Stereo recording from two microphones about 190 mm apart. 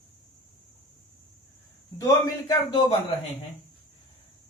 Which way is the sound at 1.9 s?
15° left (ahead or behind).